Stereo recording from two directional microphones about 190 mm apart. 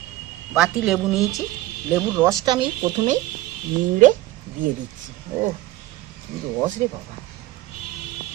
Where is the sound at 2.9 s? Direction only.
35° right (ahead or behind).